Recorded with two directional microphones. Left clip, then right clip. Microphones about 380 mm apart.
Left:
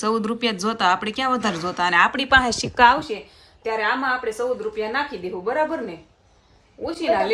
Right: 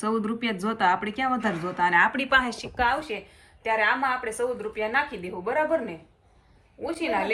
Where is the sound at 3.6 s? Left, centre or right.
Centre.